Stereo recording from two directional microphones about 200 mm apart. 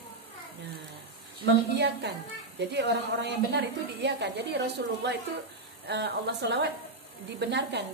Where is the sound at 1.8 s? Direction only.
60° right (ahead or behind).